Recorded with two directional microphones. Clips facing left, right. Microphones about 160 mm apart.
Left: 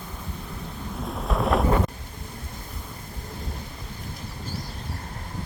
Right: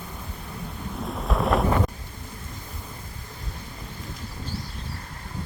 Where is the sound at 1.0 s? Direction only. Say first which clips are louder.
Even; centre (ahead or behind).